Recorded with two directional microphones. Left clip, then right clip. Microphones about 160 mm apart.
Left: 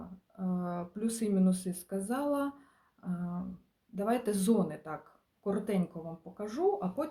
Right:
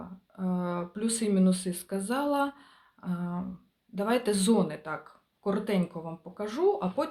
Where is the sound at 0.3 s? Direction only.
10° right (ahead or behind).